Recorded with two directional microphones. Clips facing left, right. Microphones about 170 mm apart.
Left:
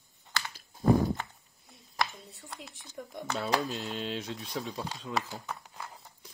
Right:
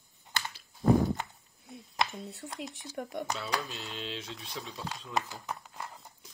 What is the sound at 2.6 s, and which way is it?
Speech, 75° right (ahead or behind).